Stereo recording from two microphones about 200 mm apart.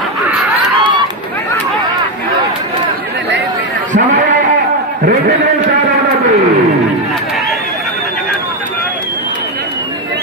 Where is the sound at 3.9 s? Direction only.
40° right (ahead or behind).